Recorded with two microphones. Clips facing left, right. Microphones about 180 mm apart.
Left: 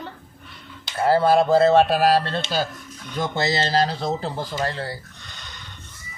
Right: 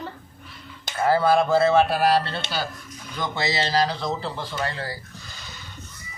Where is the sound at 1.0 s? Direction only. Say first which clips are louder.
Left 2 dB; 35° left (ahead or behind).